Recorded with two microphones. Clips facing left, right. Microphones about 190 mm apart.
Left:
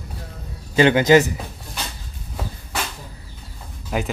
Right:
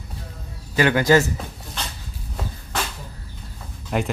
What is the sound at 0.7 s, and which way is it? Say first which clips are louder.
Speech: left 3 dB; 20° left (ahead or behind).